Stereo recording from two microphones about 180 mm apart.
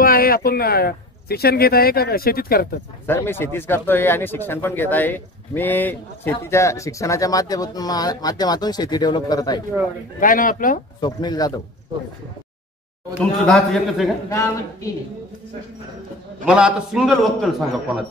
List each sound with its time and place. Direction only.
0.0 s speech: 55° left (ahead or behind)
3.1 s speech: 10° left (ahead or behind)
10.2 s speech: 50° left (ahead or behind)
11.0 s speech: 25° left (ahead or behind)
13.2 s a man's voice: 5° left (ahead or behind)
16.4 s a man's voice: 5° right (ahead or behind)